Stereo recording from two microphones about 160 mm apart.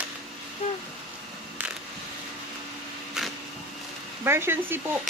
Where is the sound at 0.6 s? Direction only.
45° left (ahead or behind).